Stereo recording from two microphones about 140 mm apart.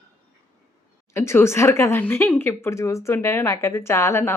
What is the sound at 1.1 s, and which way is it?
Speech, 20° left (ahead or behind).